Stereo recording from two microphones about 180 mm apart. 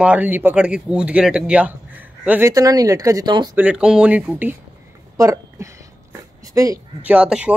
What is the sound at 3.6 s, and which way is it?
Speech, 5° right (ahead or behind).